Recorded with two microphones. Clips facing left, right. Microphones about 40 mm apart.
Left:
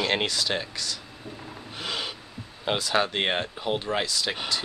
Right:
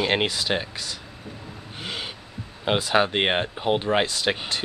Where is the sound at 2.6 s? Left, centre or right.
Centre; by 4.6 s right.